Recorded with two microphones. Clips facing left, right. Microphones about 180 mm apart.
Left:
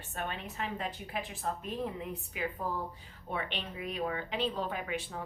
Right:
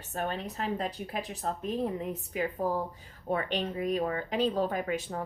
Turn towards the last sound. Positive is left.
turn(degrees=-45)  # may be behind; listen again after turning